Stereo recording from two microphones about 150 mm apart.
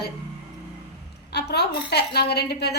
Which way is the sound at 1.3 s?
90° left.